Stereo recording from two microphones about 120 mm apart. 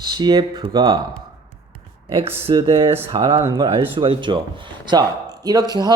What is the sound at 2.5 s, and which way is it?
Speech, 40° right (ahead or behind).